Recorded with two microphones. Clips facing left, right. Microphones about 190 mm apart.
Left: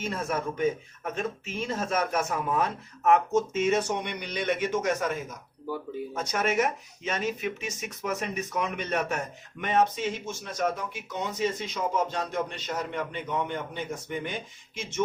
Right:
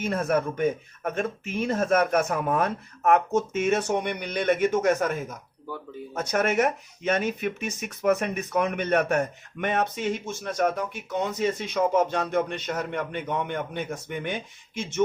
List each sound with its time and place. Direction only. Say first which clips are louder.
0.0 s speech: right 6 dB; 55° right (ahead or behind)